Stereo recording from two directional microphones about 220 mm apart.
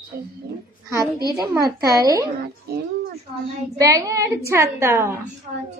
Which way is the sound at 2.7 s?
45° right (ahead or behind).